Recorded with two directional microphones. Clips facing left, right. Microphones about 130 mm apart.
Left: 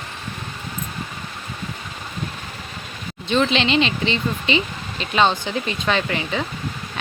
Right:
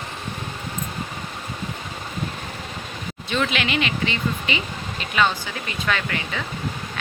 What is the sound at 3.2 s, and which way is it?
Speech, 25° left (ahead or behind).